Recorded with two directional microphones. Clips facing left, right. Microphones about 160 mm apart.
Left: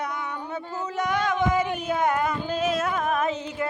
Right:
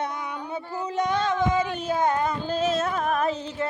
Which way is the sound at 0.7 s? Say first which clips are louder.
Right 2 dB; 15° right (ahead or behind).